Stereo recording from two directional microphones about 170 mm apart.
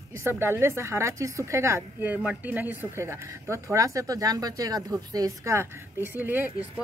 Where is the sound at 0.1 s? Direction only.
15° right (ahead or behind).